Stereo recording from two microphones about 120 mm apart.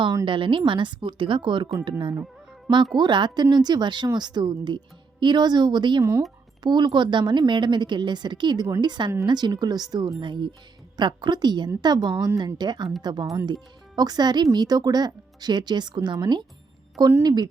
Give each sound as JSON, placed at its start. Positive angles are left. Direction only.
{"t": 0.3, "sound": "a woman's voice", "side_deg": -45}
{"t": 6.0, "sound": "speech", "side_deg": -25}
{"t": 6.6, "sound": "speech", "side_deg": -35}